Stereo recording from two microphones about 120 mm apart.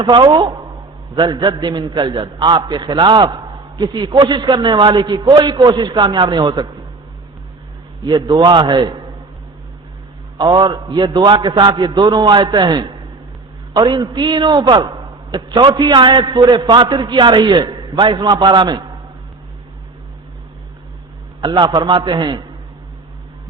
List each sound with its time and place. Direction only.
0.0 s a man's voice: 40° right (ahead or behind)
8.0 s a man's voice: 35° right (ahead or behind)
10.3 s a man's voice: 40° right (ahead or behind)
21.4 s a man's voice: 40° right (ahead or behind)